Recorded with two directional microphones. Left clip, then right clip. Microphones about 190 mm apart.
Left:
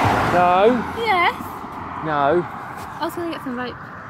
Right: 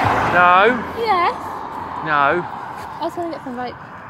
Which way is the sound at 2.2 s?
30° left (ahead or behind).